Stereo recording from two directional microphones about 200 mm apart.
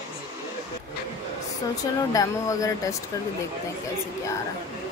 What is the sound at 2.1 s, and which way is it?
Speech, 15° left (ahead or behind).